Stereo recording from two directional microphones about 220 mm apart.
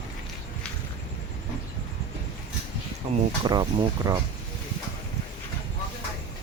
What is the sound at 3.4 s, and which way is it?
Speech, 20° right (ahead or behind).